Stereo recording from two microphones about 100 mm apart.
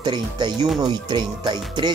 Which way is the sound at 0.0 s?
50° right (ahead or behind).